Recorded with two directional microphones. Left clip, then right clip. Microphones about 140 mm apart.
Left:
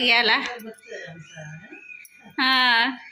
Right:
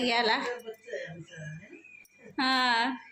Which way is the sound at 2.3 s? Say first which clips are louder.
Left 7 dB; 10° right (ahead or behind).